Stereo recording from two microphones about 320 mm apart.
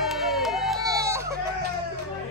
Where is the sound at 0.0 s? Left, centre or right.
Centre.